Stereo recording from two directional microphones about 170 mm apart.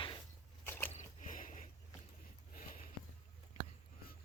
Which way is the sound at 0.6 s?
10° left (ahead or behind).